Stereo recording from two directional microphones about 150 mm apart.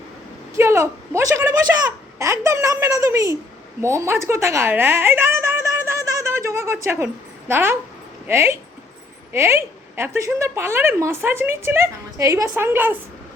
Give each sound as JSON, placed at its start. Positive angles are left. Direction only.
{"t": 0.5, "sound": "a woman's voice", "side_deg": -20}